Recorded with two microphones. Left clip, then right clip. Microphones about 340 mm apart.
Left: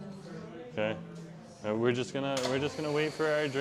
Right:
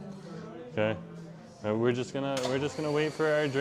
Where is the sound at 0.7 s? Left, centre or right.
Right.